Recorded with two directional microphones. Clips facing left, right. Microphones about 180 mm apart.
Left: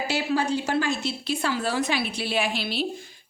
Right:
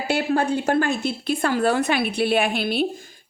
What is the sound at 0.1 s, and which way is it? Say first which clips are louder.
A woman's voice: right 5 dB; 55° right (ahead or behind).